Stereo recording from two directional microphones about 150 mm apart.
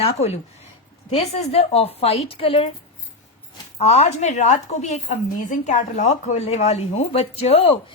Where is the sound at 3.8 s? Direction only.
45° left (ahead or behind).